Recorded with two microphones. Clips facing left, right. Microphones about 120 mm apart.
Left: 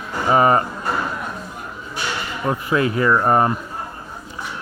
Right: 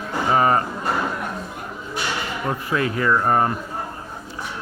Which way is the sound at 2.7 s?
20° left (ahead or behind).